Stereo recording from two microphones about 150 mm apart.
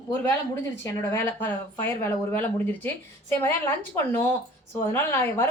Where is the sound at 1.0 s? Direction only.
15° left (ahead or behind).